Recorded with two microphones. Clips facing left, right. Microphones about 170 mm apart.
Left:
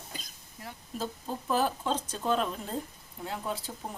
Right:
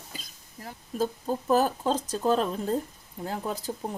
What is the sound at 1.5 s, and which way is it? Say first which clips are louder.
Speech: right 5 dB; 40° right (ahead or behind).